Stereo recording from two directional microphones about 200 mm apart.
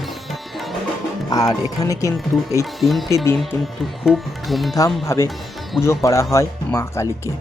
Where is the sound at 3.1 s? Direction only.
15° left (ahead or behind).